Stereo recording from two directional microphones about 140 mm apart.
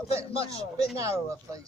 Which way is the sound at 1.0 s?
20° right (ahead or behind).